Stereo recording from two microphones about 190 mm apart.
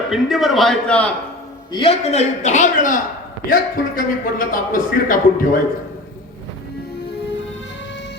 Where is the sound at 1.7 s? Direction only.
30° left (ahead or behind).